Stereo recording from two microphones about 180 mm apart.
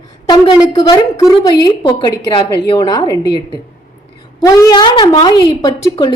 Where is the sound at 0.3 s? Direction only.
25° left (ahead or behind).